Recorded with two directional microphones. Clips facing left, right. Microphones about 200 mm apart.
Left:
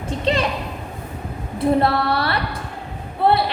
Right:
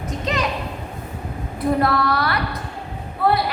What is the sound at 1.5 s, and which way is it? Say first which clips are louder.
A woman's voice: left 2 dB; 30° left (ahead or behind).